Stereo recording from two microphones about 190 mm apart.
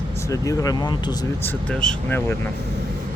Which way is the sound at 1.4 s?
5° left (ahead or behind).